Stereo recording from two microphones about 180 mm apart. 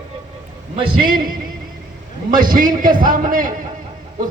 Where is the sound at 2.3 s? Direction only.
50° right (ahead or behind).